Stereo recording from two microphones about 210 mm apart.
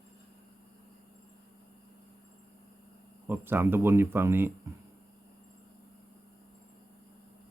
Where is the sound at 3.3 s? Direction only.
10° right (ahead or behind).